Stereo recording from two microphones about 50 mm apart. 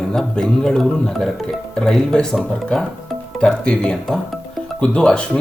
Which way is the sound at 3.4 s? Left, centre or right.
Centre.